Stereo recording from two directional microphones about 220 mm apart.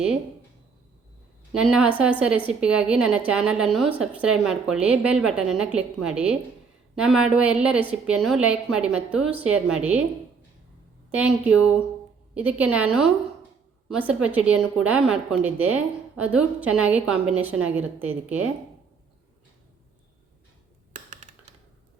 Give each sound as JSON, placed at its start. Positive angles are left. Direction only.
{"t": 1.5, "sound": "a woman's voice", "side_deg": -5}
{"t": 11.2, "sound": "a woman's voice", "side_deg": -5}
{"t": 20.9, "sound": "a sound", "side_deg": -35}